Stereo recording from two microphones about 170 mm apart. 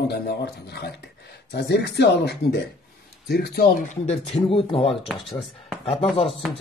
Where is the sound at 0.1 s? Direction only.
75° left (ahead or behind); by 4.9 s 35° left (ahead or behind).